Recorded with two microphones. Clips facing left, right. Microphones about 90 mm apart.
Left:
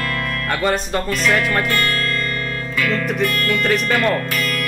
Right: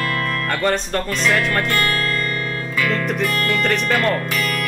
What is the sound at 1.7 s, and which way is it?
Music, 10° right (ahead or behind).